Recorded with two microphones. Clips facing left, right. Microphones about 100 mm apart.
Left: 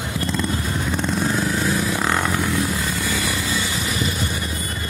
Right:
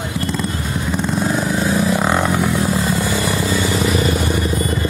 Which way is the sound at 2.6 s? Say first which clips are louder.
Right 5 dB; 35° right (ahead or behind).